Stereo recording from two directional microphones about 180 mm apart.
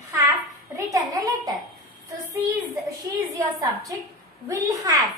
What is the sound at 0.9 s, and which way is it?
Speech, 20° right (ahead or behind).